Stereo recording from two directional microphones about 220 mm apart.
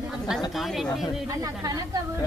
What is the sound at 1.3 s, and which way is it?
Speech, 15° right (ahead or behind).